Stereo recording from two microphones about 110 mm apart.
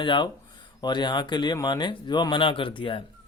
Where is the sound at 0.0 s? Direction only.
45° left (ahead or behind).